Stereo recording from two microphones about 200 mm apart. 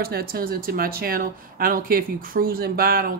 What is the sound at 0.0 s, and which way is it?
Speech, 50° right (ahead or behind).